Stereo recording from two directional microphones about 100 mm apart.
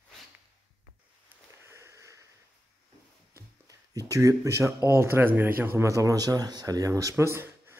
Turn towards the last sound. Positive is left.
turn(degrees=-25)  # may be behind; listen again after turning